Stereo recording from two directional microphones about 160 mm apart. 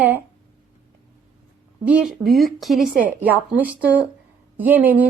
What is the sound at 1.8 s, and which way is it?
Speech, 5° right (ahead or behind).